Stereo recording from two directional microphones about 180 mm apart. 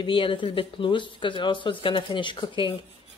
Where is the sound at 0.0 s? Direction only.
30° left (ahead or behind).